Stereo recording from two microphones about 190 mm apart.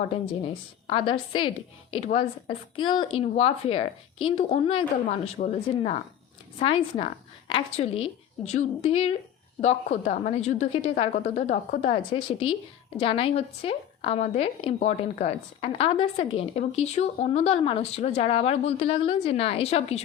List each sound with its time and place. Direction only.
0.9 s a woman's voice: 25° left (ahead or behind)